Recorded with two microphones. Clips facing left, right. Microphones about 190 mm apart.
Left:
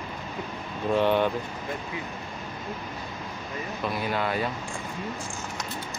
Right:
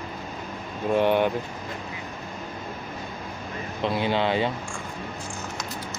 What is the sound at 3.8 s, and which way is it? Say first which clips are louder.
Speech: right 5 dB; 25° right (ahead or behind).